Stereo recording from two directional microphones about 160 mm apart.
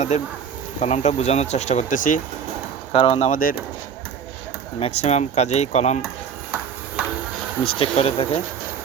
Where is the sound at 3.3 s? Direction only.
60° left (ahead or behind).